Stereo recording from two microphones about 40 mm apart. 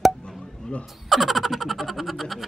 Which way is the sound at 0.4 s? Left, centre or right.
Centre.